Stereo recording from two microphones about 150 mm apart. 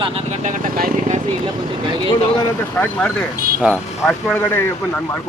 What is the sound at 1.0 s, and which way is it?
Speech, 50° right (ahead or behind).